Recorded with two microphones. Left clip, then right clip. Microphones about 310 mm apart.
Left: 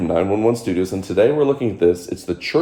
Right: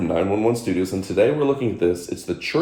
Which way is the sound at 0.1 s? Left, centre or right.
Left.